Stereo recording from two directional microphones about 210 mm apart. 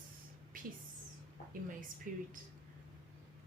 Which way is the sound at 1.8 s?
40° right (ahead or behind).